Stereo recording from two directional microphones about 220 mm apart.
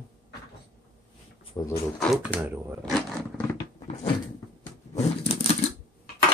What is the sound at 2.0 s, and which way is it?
Speech, 5° right (ahead or behind).